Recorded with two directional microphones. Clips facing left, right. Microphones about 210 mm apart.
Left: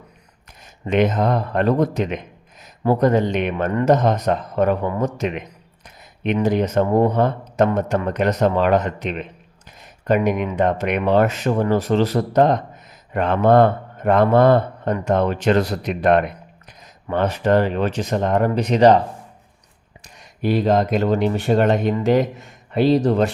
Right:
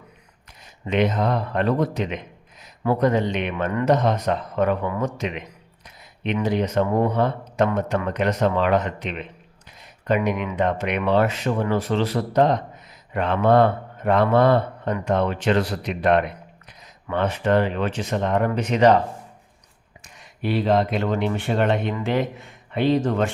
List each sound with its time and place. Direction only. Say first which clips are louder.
0.6 s a man's voice: left 3 dB; 45° left (ahead or behind)
20.1 s speech: left 4 dB; 40° left (ahead or behind)